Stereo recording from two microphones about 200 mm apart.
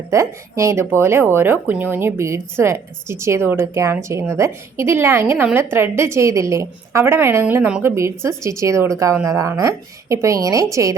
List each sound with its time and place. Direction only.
0.1 s speech: 15° right (ahead or behind)